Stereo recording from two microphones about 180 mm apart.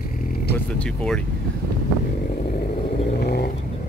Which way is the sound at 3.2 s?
60° left (ahead or behind).